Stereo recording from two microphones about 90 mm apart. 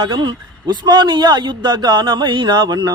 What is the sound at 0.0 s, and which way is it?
A man's voice, 60° right (ahead or behind).